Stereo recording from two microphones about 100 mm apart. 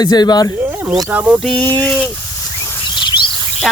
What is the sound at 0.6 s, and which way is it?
Speech, 20° right (ahead or behind).